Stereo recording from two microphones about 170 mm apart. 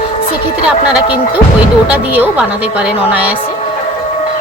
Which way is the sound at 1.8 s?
10° right (ahead or behind).